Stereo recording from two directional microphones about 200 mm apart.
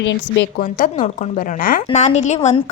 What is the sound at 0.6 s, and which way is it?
A woman's voice, 45° left (ahead or behind).